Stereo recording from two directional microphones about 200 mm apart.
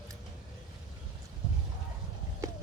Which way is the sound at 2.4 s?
15° right (ahead or behind).